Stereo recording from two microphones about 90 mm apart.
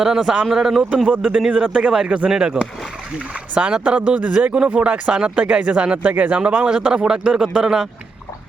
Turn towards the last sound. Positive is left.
turn(degrees=-5)  # may be behind; listen again after turning